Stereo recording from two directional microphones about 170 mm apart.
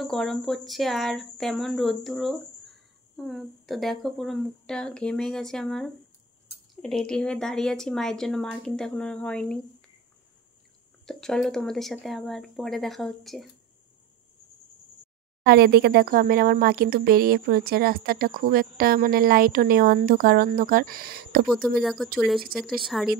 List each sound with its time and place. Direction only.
0.0 s speech: centre (ahead or behind)
11.1 s speech: 5° left (ahead or behind)
15.4 s speech: 70° right (ahead or behind)
21.5 s speech: centre (ahead or behind)